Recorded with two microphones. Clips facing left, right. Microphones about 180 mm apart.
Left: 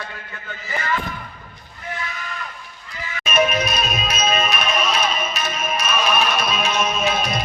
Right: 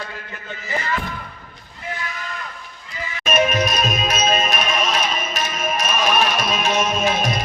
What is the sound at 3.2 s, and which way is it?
Music, 45° right (ahead or behind).